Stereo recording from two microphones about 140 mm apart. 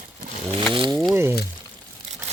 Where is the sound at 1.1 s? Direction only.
15° right (ahead or behind).